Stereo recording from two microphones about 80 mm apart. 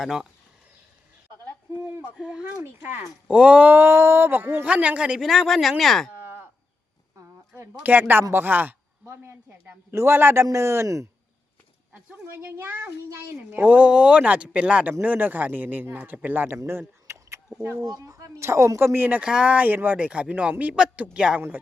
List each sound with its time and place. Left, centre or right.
0.0 s speech: centre
2.1 s speech: centre
2.6 s speech: right
3.2 s speech: centre
4.6 s speech: centre
5.2 s speech: centre
6.1 s livestock: right
7.3 s a woman's voice: right
12.2 s speech: right
16.7 s a sound: right
17.7 s speech: right
18.9 s speech: centre